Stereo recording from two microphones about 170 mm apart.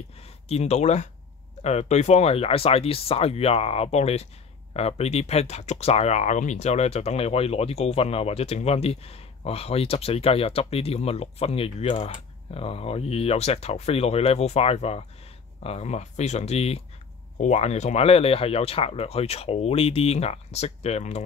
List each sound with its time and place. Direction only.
0.2 s speech: 40° left (ahead or behind)